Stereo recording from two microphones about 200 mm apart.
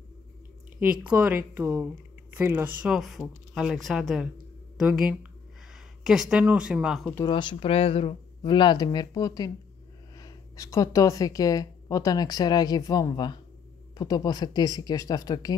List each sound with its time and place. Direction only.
1.0 s speech: 5° right (ahead or behind)
7.2 s a woman's voice: 25° left (ahead or behind)